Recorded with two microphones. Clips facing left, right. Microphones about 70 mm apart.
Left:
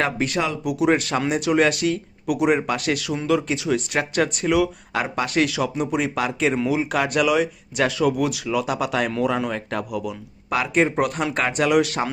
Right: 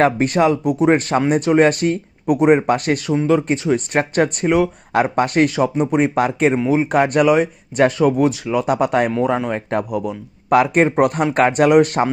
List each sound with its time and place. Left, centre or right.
0.0 s speech: right